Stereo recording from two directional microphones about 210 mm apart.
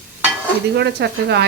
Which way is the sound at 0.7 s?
50° right (ahead or behind).